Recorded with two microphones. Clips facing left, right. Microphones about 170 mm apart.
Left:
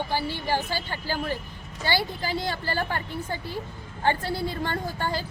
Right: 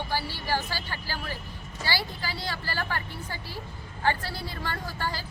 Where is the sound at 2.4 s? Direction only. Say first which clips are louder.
Left 4 dB; 20° left (ahead or behind).